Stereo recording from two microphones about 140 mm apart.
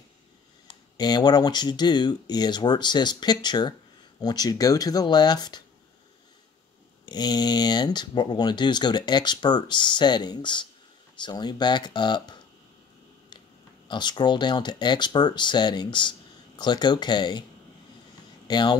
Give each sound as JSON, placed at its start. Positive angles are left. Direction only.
{"t": 0.9, "sound": "speech", "side_deg": 30}
{"t": 7.1, "sound": "speech", "side_deg": 30}
{"t": 13.8, "sound": "speech", "side_deg": 35}
{"t": 18.5, "sound": "speech", "side_deg": 30}